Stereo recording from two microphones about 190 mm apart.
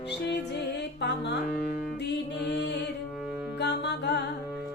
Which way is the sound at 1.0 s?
65° left (ahead or behind).